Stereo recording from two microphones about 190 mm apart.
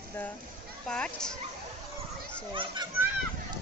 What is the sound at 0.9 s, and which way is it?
Speech, 5° left (ahead or behind).